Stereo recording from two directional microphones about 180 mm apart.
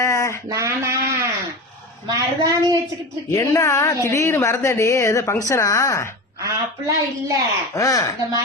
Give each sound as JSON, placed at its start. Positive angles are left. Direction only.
{"t": 0.0, "sound": "a sound", "side_deg": 15}
{"t": 0.4, "sound": "a woman's voice", "side_deg": -15}
{"t": 3.2, "sound": "a woman's voice", "side_deg": 15}
{"t": 6.4, "sound": "a woman's voice", "side_deg": -20}
{"t": 7.8, "sound": "speech", "side_deg": 20}